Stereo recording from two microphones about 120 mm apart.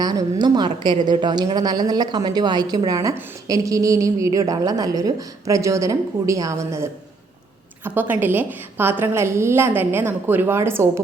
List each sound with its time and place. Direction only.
0.0 s a woman's voice: 35° right (ahead or behind)
7.9 s a woman's voice: 15° right (ahead or behind)